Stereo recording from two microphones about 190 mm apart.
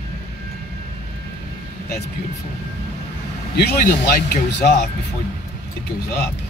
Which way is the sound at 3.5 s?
55° left (ahead or behind).